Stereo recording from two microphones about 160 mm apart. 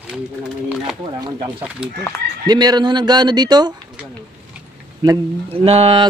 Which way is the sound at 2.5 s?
25° right (ahead or behind).